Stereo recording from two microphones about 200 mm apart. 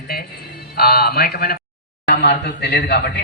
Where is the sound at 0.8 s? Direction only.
50° left (ahead or behind).